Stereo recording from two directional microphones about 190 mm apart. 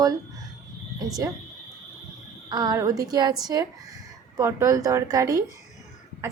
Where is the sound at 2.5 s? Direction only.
20° right (ahead or behind).